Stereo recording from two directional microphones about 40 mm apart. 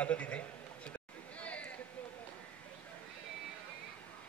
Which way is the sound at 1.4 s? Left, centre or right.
Left.